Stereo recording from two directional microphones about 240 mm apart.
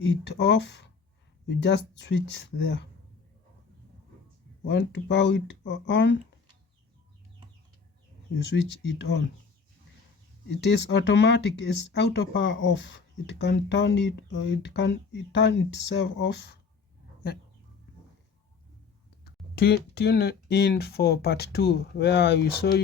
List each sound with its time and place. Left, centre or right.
0.0 s speech: left
4.6 s speech: left
8.4 s speech: left
10.5 s speech: left
19.2 s speech: left